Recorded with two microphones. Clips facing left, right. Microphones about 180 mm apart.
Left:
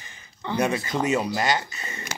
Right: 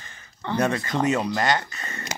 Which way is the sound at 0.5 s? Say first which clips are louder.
Right 1 dB; 10° left (ahead or behind).